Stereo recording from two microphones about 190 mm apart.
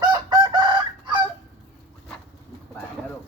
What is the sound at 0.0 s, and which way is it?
Chicken, 25° right (ahead or behind).